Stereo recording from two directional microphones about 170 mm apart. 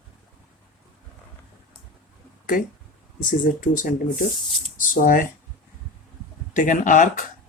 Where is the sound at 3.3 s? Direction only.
50° left (ahead or behind).